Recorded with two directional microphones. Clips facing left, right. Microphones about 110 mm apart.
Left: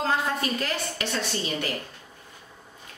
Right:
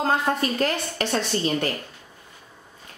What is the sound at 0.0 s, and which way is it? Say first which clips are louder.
A woman's voice: right 3 dB; 40° right (ahead or behind).